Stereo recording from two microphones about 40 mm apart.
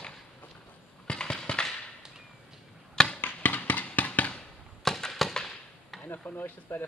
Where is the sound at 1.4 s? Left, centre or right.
Left.